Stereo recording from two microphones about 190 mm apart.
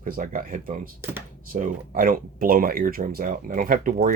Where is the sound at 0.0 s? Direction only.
45° right (ahead or behind).